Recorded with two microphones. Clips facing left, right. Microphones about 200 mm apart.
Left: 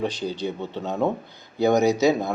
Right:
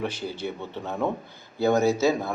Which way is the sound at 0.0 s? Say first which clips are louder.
Left 4 dB; 15° left (ahead or behind).